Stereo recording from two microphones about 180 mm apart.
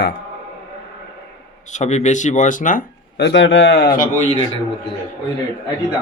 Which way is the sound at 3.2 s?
80° left.